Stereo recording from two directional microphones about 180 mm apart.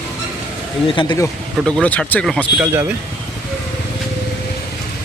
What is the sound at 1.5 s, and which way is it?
Speech, 5° left (ahead or behind).